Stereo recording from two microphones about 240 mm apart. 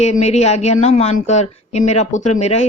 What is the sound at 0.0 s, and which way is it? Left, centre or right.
Speech, left.